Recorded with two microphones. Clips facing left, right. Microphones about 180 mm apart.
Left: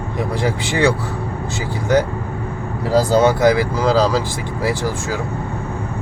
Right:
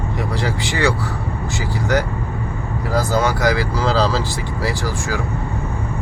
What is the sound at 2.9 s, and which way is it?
Speech, 30° left (ahead or behind).